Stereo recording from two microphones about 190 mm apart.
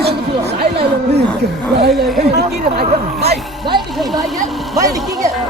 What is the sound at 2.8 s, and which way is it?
Speech, 35° right (ahead or behind).